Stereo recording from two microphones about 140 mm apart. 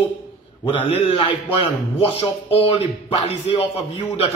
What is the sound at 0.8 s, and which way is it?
Speech, 40° left (ahead or behind).